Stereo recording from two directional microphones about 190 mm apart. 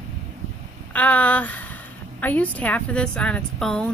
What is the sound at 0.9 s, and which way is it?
A woman's voice, 10° left (ahead or behind).